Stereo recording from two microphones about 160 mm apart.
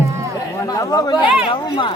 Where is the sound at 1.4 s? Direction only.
35° left (ahead or behind).